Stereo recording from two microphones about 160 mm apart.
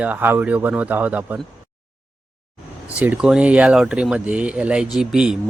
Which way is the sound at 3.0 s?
5° right (ahead or behind).